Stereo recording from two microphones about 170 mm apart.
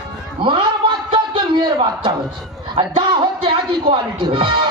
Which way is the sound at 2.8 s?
30° right (ahead or behind).